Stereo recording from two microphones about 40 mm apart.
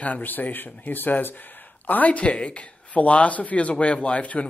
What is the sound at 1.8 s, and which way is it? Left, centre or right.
Speech, left.